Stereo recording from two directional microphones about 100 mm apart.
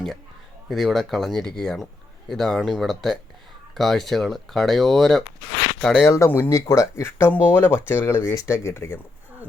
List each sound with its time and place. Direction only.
0.7 s speech: centre (ahead or behind)
6.1 s speech: 30° left (ahead or behind)